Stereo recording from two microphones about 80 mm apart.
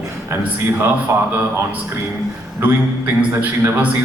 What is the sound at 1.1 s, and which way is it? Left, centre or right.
Speech, right.